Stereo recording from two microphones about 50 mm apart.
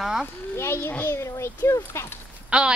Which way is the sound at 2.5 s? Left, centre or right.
Right.